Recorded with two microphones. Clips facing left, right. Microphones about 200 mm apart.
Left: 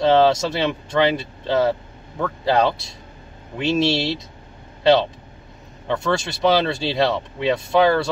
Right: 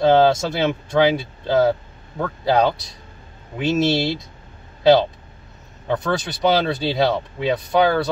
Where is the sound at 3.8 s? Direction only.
45° right (ahead or behind).